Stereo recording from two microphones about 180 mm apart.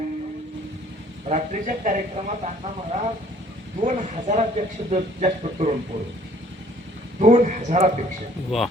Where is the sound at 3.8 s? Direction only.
45° right (ahead or behind).